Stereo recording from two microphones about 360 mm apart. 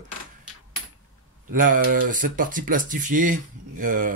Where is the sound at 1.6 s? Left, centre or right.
Right.